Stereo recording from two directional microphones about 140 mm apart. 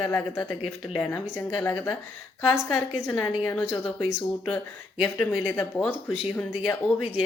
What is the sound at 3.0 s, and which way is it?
Speech, 20° left (ahead or behind).